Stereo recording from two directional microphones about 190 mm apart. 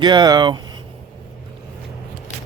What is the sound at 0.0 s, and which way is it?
Speech, 25° right (ahead or behind).